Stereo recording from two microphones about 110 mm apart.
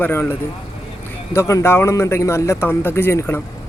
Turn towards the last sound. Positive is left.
turn(degrees=20)  # may be behind; listen again after turning